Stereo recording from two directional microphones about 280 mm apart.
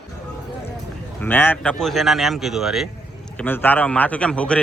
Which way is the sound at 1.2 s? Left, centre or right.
Centre.